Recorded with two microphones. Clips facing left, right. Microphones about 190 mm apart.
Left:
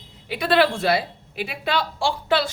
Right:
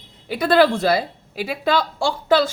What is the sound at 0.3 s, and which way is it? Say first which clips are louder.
A woman's voice: right 4 dB; 45° right (ahead or behind).